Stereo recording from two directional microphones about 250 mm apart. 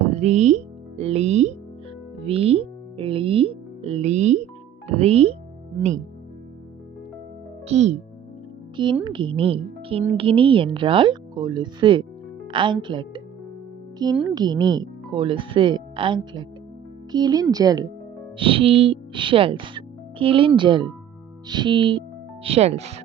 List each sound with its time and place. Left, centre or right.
0.0 s speech: right
7.7 s speech: right
14.3 s speech: centre